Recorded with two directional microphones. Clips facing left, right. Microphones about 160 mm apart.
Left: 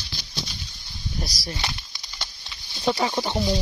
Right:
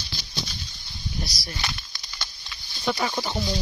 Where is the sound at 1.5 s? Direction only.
25° left (ahead or behind).